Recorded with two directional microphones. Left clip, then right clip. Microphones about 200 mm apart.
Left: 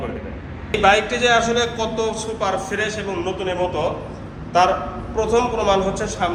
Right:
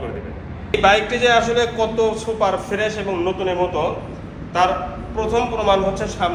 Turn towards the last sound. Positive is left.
turn(degrees=0)  # may be behind; listen again after turning